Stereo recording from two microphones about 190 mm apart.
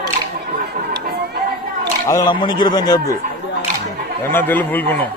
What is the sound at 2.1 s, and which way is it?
A man's voice, 20° left (ahead or behind).